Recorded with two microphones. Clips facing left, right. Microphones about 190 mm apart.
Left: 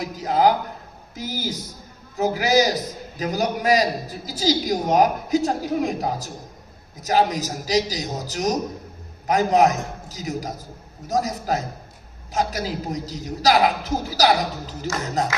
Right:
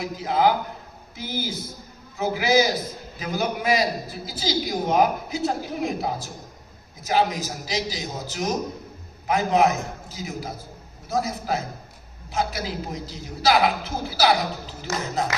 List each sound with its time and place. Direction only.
0.0 s a man's voice: 40° left (ahead or behind)